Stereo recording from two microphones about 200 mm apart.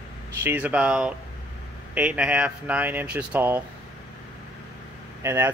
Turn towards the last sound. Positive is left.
turn(degrees=-15)  # may be behind; listen again after turning